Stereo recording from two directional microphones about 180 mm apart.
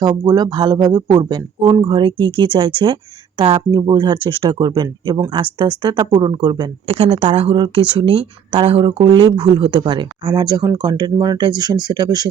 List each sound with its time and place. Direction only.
0.0 s speech: 25° right (ahead or behind)